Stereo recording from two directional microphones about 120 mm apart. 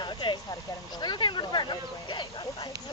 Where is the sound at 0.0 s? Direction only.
40° left (ahead or behind).